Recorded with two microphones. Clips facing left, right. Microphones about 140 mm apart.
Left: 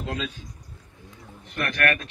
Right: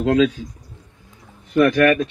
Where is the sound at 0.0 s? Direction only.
90° right.